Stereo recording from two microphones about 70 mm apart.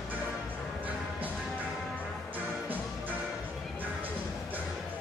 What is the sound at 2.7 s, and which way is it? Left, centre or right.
Music, right.